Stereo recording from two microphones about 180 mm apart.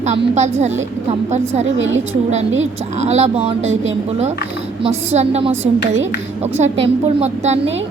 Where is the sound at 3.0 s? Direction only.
35° right (ahead or behind).